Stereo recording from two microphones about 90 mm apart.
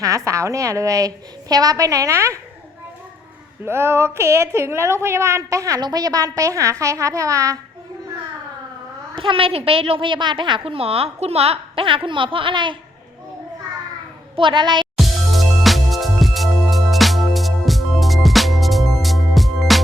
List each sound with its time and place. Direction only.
0.0 s a woman's voice: 35° right (ahead or behind)
3.6 s a woman's voice: 25° right (ahead or behind)
9.1 s a woman's voice: 75° right (ahead or behind)
14.3 s a woman's voice: 65° right (ahead or behind)
14.9 s music: centre (ahead or behind)